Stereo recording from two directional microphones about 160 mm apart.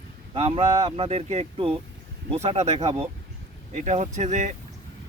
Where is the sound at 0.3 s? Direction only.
40° right (ahead or behind).